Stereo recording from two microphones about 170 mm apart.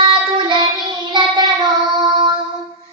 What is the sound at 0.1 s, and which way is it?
Child singing, 30° right (ahead or behind).